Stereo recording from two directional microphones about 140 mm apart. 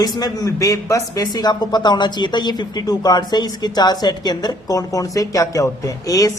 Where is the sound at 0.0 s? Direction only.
25° left (ahead or behind).